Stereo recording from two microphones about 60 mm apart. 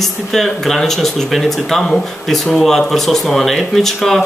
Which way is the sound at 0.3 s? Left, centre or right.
Centre.